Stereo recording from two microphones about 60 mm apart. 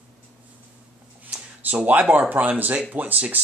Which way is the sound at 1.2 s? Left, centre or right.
Right.